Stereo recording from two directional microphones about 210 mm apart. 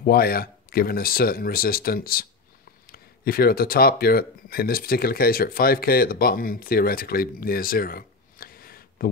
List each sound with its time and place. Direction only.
0.0 s speech: 45° left (ahead or behind)